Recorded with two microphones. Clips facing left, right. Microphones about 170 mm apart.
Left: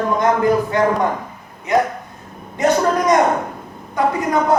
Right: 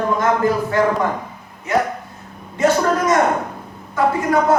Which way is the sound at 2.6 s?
20° left (ahead or behind).